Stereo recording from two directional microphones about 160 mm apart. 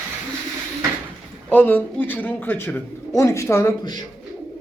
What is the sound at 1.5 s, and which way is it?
A man's voice, 10° left (ahead or behind).